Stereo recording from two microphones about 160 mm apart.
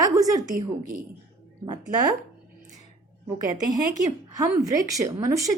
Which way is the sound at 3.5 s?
25° right (ahead or behind).